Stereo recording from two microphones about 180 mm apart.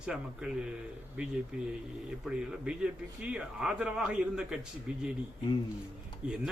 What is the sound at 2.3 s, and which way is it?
Speech, 5° right (ahead or behind).